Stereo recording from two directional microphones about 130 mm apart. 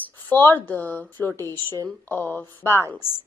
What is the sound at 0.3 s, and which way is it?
Speech, 15° left (ahead or behind).